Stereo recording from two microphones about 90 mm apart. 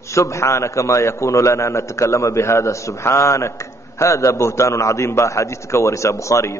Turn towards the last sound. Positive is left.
turn(degrees=35)  # may be behind; listen again after turning